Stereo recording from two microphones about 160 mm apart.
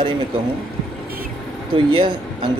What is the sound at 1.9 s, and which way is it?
Speech, 30° right (ahead or behind).